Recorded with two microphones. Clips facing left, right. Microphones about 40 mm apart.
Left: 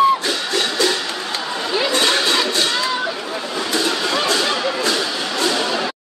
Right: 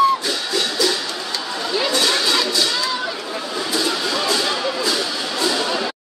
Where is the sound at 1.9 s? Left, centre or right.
Left.